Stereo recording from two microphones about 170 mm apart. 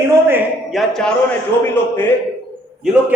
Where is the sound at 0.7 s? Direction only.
Centre (ahead or behind).